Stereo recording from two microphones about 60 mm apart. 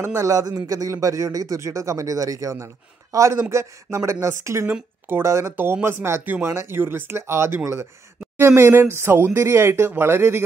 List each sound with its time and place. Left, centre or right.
0.0 s speech: right
0.7 s a man's voice: right
1.0 s speech: right
1.6 s speech: right
2.5 s a man's voice: right
5.0 s a man's voice: right